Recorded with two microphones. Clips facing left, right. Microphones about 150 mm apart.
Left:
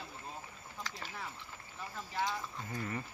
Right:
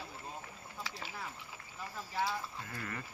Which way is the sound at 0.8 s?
5° right (ahead or behind).